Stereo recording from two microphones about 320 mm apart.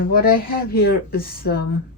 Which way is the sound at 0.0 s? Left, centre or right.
Left.